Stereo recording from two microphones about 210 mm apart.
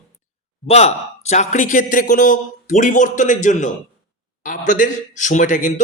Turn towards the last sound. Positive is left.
turn(degrees=35)  # may be behind; listen again after turning